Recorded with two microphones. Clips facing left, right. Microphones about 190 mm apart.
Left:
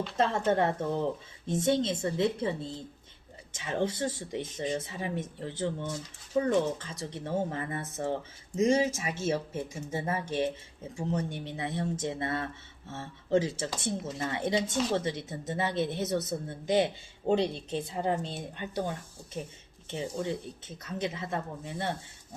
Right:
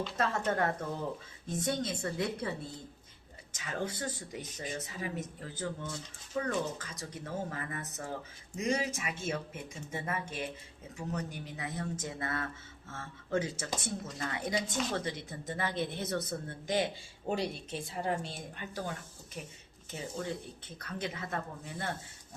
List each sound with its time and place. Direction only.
0.2 s speech: 25° left (ahead or behind)